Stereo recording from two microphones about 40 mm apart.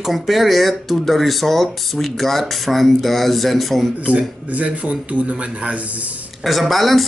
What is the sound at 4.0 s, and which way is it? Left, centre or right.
A man's voice, right.